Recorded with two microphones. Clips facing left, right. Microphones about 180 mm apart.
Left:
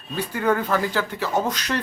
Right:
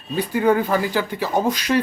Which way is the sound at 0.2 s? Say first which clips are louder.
Right 4 dB; 15° right (ahead or behind).